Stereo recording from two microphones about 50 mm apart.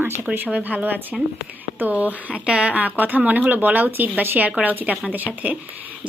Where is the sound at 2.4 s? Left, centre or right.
Right.